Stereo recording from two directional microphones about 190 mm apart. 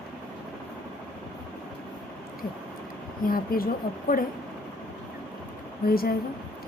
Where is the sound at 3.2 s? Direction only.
50° left (ahead or behind).